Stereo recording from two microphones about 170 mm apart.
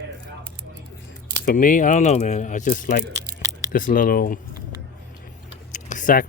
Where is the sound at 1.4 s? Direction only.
50° left (ahead or behind).